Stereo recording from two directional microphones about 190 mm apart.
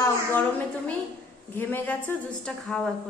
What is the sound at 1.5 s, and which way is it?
A woman's voice, 10° left (ahead or behind).